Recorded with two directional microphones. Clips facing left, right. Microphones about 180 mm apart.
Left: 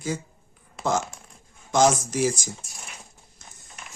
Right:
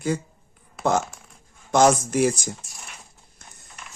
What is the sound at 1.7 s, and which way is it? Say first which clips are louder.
Speech: right 3 dB; 60° right (ahead or behind).